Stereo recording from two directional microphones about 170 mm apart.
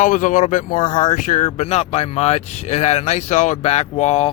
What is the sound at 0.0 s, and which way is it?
Speech, 50° left (ahead or behind).